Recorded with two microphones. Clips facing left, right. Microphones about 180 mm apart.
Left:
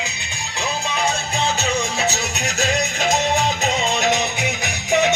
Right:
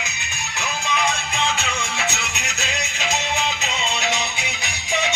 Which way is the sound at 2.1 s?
45° left (ahead or behind).